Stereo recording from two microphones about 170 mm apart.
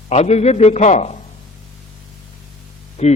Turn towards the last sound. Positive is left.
turn(degrees=40)  # may be behind; listen again after turning